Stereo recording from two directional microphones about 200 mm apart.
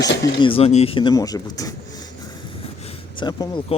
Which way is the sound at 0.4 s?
30° left (ahead or behind).